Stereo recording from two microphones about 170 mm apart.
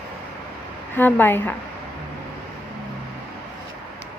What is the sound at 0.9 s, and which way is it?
Speech, 10° left (ahead or behind).